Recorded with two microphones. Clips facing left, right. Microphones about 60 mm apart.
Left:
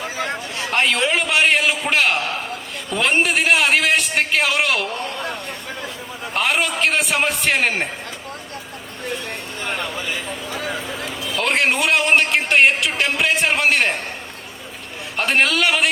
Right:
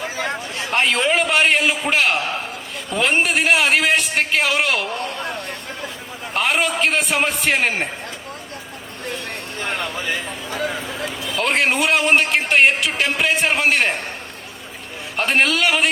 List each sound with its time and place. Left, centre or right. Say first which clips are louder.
0.3 s a man's voice: even; centre
6.3 s a man's voice: right 1 dB; centre
9.8 s a man's voice: right 1 dB; centre
15.1 s a man's voice: even; centre